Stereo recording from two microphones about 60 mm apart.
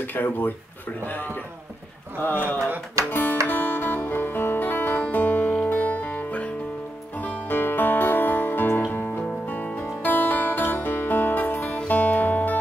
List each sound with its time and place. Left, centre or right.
0.0 s a man's voice: left
3.1 s music: left